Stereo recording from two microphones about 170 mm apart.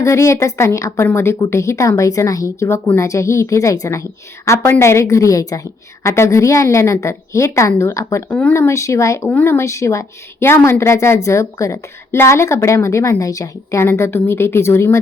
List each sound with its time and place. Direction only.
0.0 s a woman's voice: 15° left (ahead or behind)